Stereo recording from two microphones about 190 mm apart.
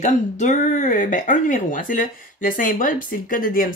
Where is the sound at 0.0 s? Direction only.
40° left (ahead or behind).